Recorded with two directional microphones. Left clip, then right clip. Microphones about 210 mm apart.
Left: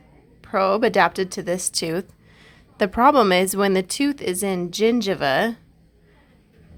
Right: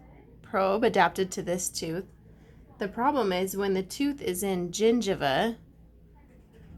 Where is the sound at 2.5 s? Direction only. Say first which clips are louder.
Left 12 dB; 40° left (ahead or behind); by 5.6 s 20° left (ahead or behind).